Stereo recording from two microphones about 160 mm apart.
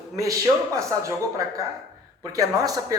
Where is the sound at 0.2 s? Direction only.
20° right (ahead or behind).